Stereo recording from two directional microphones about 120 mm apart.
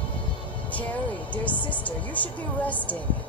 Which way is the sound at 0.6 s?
10° left (ahead or behind).